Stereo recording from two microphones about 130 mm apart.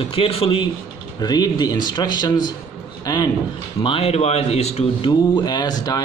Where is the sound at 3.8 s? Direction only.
45° left (ahead or behind).